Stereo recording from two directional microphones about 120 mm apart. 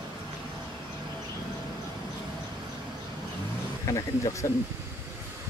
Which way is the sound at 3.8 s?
25° left (ahead or behind).